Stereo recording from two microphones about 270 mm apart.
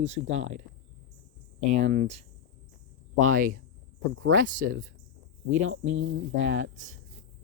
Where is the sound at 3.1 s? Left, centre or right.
Right.